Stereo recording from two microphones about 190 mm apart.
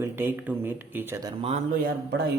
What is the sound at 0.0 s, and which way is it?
Speech, 10° right (ahead or behind).